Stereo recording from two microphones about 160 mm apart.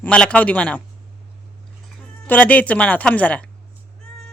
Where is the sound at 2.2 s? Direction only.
10° left (ahead or behind).